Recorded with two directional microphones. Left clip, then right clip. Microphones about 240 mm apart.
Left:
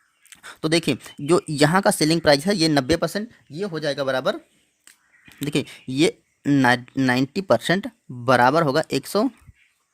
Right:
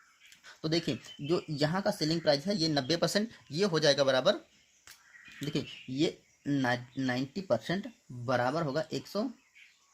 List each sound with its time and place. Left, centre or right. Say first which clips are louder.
0.3 s speech: left 11 dB; left
5.4 s speech: left 11 dB; left